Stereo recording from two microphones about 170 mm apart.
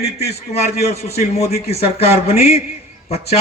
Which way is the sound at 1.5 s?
40° left (ahead or behind).